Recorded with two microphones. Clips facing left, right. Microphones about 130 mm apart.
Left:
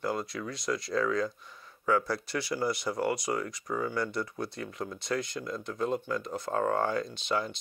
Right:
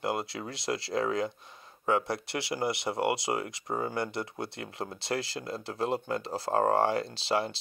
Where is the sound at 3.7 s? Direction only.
40° right (ahead or behind).